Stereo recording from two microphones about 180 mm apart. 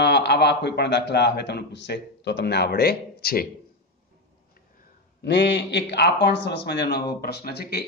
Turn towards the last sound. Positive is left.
turn(degrees=65)  # may be behind; listen again after turning